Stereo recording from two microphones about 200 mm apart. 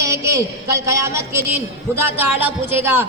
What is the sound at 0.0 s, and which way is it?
A woman's voice, 15° right (ahead or behind).